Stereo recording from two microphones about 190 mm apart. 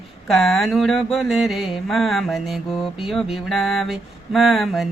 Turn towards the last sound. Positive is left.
turn(degrees=0)  # may be behind; listen again after turning